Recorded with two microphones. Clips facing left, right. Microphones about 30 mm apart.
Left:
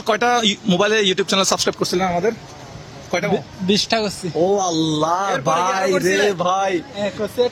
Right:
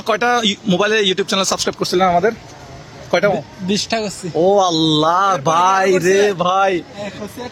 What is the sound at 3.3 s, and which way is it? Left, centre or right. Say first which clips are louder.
Speech: left 1 dB; centre.